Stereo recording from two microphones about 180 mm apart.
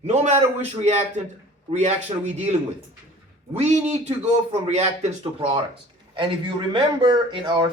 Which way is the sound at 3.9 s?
35° right (ahead or behind).